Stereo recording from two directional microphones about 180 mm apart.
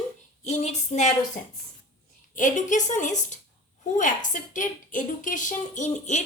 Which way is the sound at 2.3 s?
45° left (ahead or behind).